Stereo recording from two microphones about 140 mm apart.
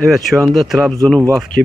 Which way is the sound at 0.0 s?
Centre (ahead or behind).